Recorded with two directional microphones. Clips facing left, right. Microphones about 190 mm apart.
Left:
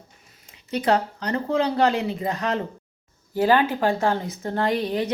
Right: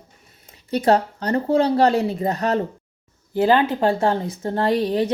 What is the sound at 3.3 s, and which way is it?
A woman's voice, 25° right (ahead or behind).